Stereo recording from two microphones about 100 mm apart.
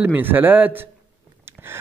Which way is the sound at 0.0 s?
20° right (ahead or behind).